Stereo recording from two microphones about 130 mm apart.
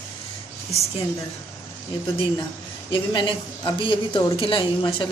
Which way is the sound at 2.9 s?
40° left (ahead or behind).